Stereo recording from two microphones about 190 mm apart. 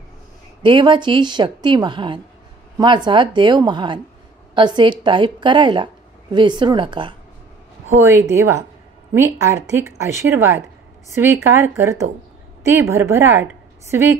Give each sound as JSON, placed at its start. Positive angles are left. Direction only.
{"t": 0.6, "sound": "a woman's voice", "side_deg": -25}
{"t": 8.0, "sound": "a woman's voice", "side_deg": -15}